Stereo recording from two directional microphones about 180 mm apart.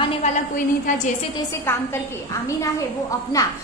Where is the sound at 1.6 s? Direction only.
15° left (ahead or behind).